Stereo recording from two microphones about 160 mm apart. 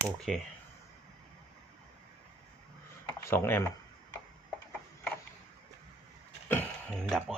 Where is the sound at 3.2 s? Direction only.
15° left (ahead or behind).